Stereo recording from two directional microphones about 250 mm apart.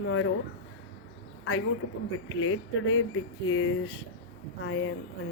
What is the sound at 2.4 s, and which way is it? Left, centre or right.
Speech, left.